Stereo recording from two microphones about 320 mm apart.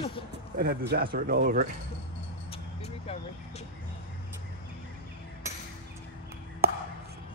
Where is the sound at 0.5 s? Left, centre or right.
Right.